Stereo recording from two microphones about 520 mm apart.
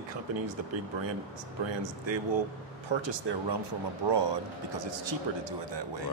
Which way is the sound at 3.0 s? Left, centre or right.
Right.